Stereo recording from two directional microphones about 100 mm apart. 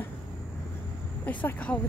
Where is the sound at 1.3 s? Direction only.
15° left (ahead or behind).